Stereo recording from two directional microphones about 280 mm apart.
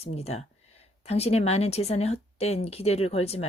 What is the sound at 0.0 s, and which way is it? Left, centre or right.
Speech, left.